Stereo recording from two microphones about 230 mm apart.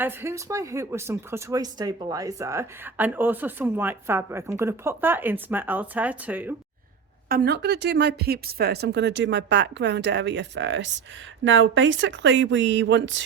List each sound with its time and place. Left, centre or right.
0.0 s speech: centre
7.3 s speech: right